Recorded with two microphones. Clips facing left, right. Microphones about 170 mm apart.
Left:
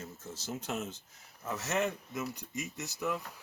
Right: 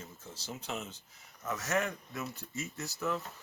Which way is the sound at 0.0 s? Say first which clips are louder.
Left 4 dB; 45° left (ahead or behind).